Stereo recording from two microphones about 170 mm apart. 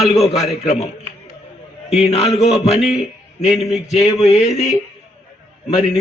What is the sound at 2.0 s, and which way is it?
Speech, 35° left (ahead or behind).